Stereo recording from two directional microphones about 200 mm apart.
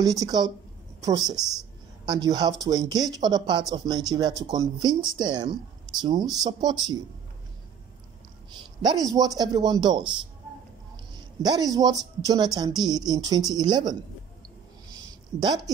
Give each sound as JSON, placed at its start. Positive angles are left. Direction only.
{"t": 0.0, "sound": "speech", "side_deg": -15}
{"t": 8.8, "sound": "speech", "side_deg": -20}
{"t": 11.4, "sound": "speech", "side_deg": -20}